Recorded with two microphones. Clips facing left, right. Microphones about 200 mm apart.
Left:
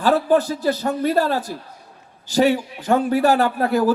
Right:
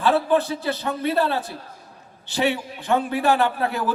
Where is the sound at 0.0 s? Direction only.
40° left (ahead or behind).